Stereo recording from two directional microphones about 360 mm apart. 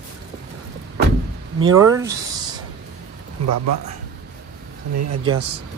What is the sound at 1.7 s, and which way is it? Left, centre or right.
Speech, centre.